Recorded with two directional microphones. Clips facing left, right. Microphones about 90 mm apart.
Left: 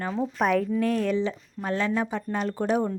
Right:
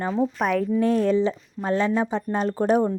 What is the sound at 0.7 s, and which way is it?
Speech, 25° right (ahead or behind).